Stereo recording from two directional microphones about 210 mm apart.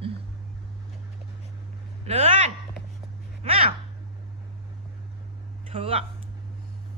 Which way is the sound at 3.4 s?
25° right (ahead or behind).